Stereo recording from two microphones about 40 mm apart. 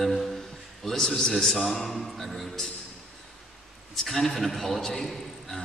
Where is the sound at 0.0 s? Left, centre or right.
Centre.